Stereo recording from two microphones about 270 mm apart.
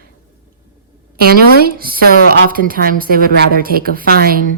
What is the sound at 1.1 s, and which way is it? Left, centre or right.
A woman's voice, right.